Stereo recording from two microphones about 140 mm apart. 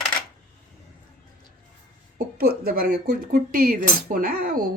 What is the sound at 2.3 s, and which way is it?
Speech, 90° right.